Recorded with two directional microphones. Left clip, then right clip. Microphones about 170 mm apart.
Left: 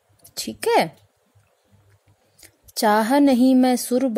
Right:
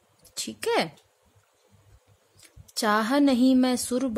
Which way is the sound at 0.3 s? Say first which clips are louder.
Left 7 dB; 20° left (ahead or behind).